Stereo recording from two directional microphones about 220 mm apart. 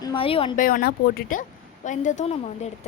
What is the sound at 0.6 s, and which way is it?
Speech, 40° left (ahead or behind).